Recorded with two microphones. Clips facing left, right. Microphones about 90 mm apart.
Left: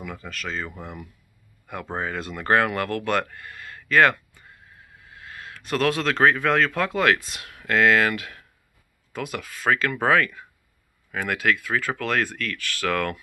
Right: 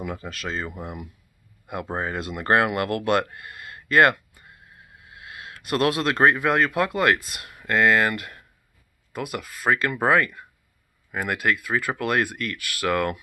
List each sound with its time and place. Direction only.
0.0 s speech: 20° right (ahead or behind)
5.8 s speech: 10° right (ahead or behind)